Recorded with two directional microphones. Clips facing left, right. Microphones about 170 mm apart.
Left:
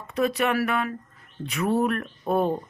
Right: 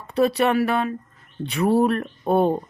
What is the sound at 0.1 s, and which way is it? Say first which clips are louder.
Speech: right 5 dB; 35° right (ahead or behind).